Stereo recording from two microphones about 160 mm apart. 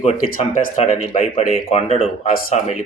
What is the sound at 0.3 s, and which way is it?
Speech, 55° left (ahead or behind).